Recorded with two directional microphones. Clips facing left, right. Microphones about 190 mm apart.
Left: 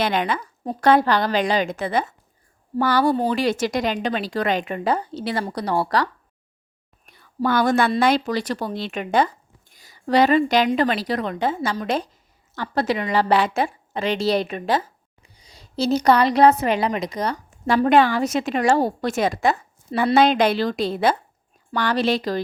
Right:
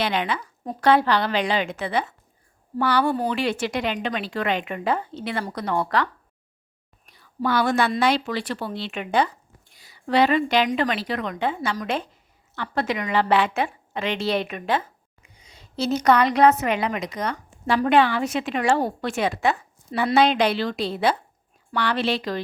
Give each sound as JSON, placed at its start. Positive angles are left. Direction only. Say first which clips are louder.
{"t": 0.0, "sound": "a woman's voice", "louder": "left 3 dB", "side_deg": 45}
{"t": 7.0, "sound": "a woman's voice", "louder": "left 3 dB", "side_deg": 55}